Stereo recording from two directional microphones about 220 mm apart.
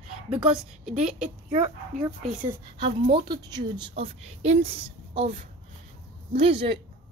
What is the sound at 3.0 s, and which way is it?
A woman's voice, 20° right (ahead or behind).